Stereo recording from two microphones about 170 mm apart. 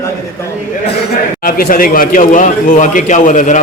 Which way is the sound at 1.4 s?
55° left (ahead or behind).